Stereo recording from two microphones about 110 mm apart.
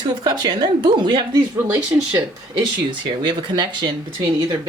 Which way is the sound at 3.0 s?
40° right (ahead or behind).